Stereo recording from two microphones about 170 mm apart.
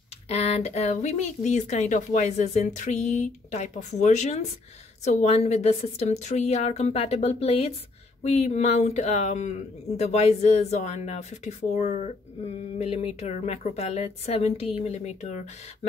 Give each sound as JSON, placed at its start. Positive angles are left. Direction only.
{"t": 0.3, "sound": "a woman's voice", "side_deg": 40}